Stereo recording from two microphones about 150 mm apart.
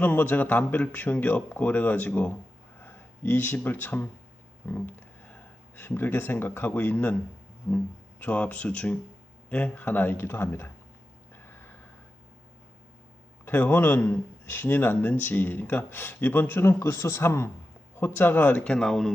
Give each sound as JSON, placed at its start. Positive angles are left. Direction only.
{"t": 0.0, "sound": "speech", "side_deg": 10}
{"t": 8.2, "sound": "speech", "side_deg": 10}
{"t": 13.4, "sound": "speech", "side_deg": 15}